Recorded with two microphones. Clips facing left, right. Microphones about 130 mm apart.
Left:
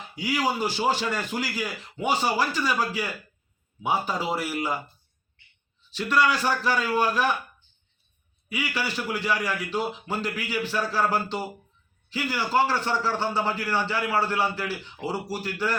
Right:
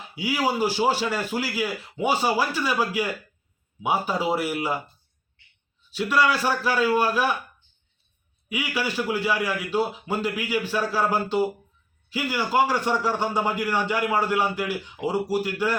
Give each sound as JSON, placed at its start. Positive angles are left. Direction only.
{"t": 0.2, "sound": "a man's voice", "side_deg": -10}
{"t": 5.9, "sound": "a man's voice", "side_deg": -10}
{"t": 8.4, "sound": "a man's voice", "side_deg": -10}